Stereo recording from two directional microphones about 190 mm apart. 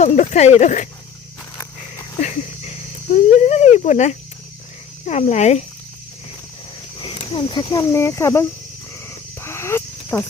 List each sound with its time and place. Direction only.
0.0 s speech: 35° left (ahead or behind)
2.2 s a sound: 35° left (ahead or behind)
3.2 s speech: 35° left (ahead or behind)
7.0 s speech: 25° left (ahead or behind)
9.0 s wild animals: 15° left (ahead or behind)